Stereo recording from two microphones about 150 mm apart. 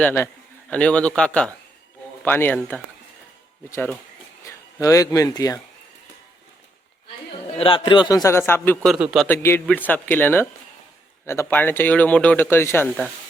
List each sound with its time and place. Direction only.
0.0 s speech: 15° left (ahead or behind)
4.4 s speech: 20° left (ahead or behind)
7.5 s a man's voice: 35° left (ahead or behind); by 8.9 s 15° left (ahead or behind)
8.9 s a man's voice: 5° right (ahead or behind)
9.2 s speech: 15° left (ahead or behind)